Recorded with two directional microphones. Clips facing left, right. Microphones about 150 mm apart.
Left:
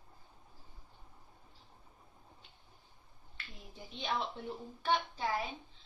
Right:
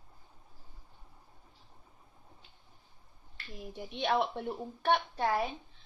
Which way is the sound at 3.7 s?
70° right (ahead or behind).